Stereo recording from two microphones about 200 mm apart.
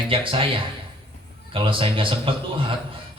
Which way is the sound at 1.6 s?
25° right (ahead or behind).